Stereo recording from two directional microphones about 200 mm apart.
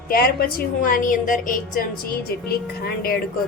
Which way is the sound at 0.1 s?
50° left (ahead or behind).